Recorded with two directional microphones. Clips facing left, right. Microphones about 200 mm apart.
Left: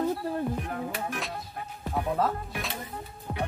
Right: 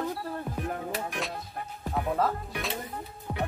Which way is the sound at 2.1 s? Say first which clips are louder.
Even; centre (ahead or behind).